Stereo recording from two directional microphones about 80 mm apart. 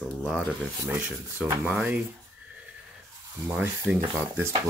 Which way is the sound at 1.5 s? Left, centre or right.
Right.